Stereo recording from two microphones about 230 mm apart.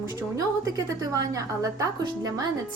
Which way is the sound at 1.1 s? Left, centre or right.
Centre.